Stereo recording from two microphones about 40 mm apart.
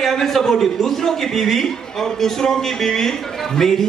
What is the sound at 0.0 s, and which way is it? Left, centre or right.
A man's voice, centre.